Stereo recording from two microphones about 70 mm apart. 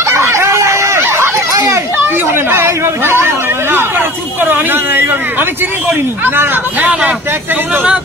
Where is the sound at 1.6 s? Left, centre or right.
Right.